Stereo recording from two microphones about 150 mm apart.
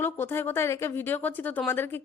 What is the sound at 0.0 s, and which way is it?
Speech, 15° left (ahead or behind).